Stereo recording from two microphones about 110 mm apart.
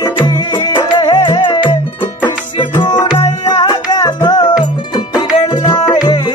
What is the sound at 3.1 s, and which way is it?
Music, 40° left (ahead or behind).